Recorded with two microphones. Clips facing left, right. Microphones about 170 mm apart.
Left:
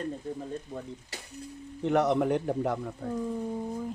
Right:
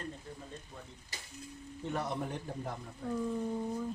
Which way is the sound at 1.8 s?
75° left (ahead or behind).